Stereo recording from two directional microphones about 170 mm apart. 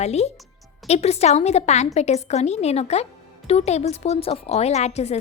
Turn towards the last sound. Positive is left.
turn(degrees=40)  # may be behind; listen again after turning